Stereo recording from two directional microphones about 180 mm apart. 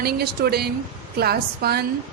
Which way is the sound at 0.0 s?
60° right (ahead or behind).